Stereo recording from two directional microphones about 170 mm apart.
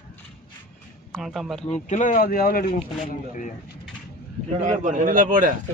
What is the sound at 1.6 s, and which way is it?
Speech, 40° left (ahead or behind).